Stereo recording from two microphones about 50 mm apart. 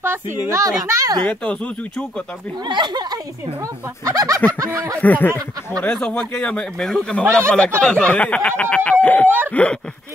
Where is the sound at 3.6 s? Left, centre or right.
Right.